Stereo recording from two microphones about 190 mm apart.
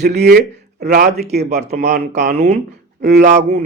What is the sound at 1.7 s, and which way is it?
Speech, 40° right (ahead or behind).